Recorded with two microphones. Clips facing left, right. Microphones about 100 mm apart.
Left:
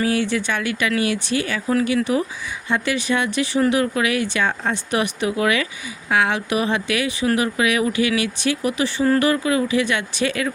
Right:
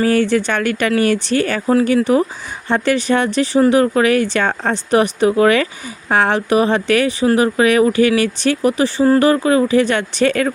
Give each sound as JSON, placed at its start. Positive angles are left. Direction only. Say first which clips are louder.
{"t": 0.0, "sound": "speech", "louder": "right 6 dB", "side_deg": -50}
{"t": 1.7, "sound": "speech", "louder": "right 6 dB", "side_deg": -40}
{"t": 4.9, "sound": "speech", "louder": "right 10 dB", "side_deg": -40}
{"t": 7.3, "sound": "speech", "louder": "right 6 dB", "side_deg": -35}